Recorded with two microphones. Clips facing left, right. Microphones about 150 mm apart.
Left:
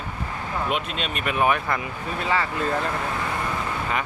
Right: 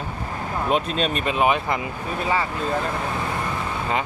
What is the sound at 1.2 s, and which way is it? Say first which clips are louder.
Speech: left 1 dB; 20° right (ahead or behind).